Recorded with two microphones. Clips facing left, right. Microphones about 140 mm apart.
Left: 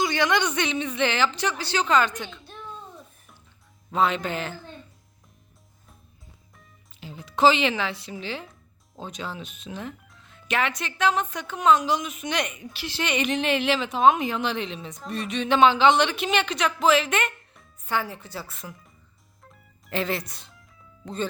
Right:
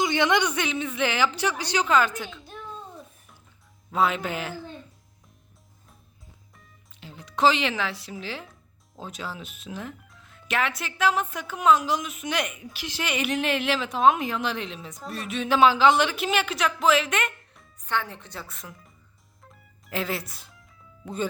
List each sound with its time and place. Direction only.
0.0 s a sound: 20° right (ahead or behind)
0.4 s a woman's voice: 5° right (ahead or behind)
3.9 s a woman's voice: 5° right (ahead or behind)
6.5 s speech: centre (ahead or behind)
19.4 s music: centre (ahead or behind)